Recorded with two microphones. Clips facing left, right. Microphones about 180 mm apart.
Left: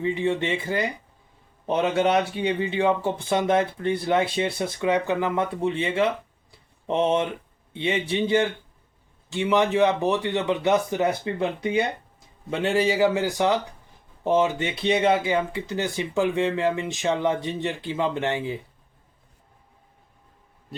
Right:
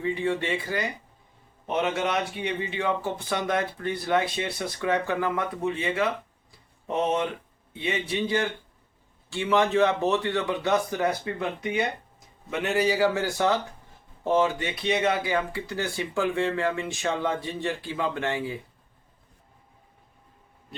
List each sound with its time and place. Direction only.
0.0 s speech: 20° left (ahead or behind)